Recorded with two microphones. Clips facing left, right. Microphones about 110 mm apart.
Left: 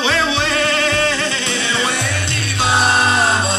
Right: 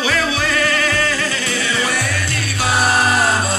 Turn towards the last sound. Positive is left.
turn(degrees=25)  # may be behind; listen again after turning